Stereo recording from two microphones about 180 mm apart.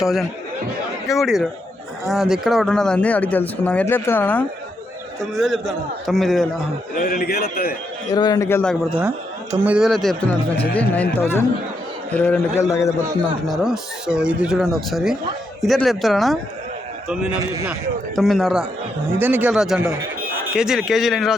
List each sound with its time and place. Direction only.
0.0 s speech: centre (ahead or behind)
7.0 s a man's voice: 55° left (ahead or behind)
8.1 s speech: 20° left (ahead or behind)
9.0 s speech: 10° right (ahead or behind); by 12.6 s 10° left (ahead or behind)
13.5 s speech: 5° right (ahead or behind)
19.2 s speech: 10° right (ahead or behind)